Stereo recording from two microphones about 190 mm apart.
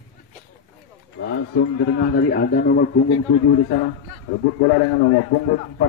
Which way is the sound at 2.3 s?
55° left (ahead or behind).